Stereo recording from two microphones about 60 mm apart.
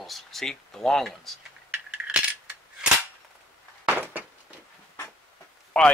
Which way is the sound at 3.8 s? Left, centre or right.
Right.